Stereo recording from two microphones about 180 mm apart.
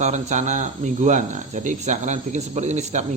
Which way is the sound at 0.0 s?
40° right (ahead or behind).